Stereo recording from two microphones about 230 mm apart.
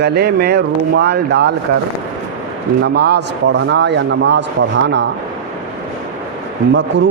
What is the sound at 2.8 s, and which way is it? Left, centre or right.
A man's voice, right.